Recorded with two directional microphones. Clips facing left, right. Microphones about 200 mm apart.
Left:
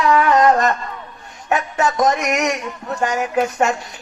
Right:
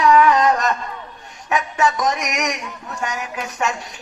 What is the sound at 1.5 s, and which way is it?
Music, 35° left (ahead or behind).